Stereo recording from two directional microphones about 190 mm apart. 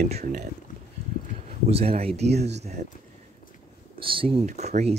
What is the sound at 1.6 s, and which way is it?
Speech, 35° right (ahead or behind).